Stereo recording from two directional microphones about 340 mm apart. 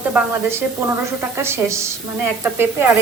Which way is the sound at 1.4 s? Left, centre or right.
Centre.